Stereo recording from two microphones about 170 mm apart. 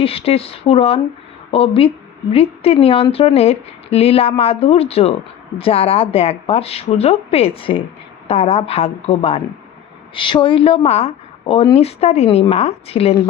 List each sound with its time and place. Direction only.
0.0 s a woman's voice: 35° left (ahead or behind)